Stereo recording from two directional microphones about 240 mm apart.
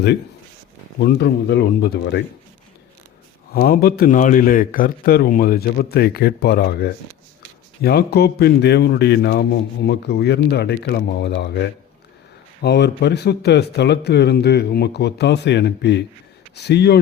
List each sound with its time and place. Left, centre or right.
0.9 s speech: left
3.5 s a man's voice: left